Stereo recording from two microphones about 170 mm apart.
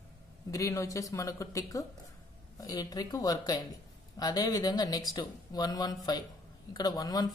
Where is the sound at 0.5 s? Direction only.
20° left (ahead or behind).